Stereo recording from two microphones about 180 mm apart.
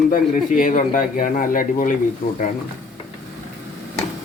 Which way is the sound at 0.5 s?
45° left (ahead or behind).